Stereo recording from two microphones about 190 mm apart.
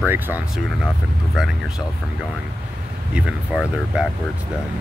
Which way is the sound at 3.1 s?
5° right (ahead or behind).